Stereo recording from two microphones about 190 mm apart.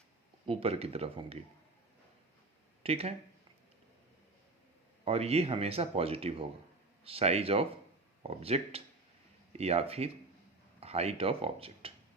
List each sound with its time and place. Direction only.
0.4 s speech: 30° right (ahead or behind)
2.8 s speech: 30° right (ahead or behind)
5.0 s speech: 30° right (ahead or behind)